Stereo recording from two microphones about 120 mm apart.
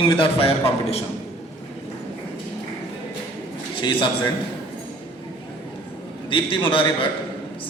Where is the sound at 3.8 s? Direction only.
40° left (ahead or behind).